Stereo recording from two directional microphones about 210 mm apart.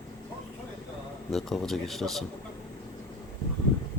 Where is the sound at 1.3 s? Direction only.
Centre (ahead or behind).